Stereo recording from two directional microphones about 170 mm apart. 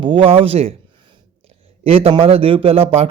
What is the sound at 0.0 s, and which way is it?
Speech, 30° right (ahead or behind).